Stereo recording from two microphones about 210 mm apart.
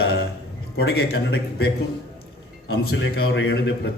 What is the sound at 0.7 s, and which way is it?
Speech, 50° left (ahead or behind).